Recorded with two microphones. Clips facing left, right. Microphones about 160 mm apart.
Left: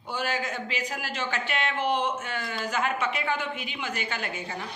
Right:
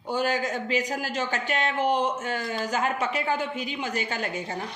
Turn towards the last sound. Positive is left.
turn(degrees=-40)  # may be behind; listen again after turning